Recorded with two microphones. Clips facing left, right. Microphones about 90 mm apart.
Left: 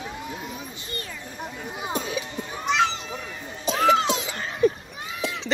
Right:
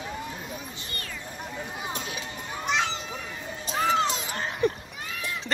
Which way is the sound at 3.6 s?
85° left.